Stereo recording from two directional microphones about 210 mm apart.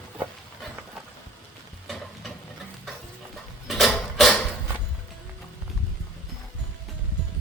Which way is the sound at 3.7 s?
Centre (ahead or behind).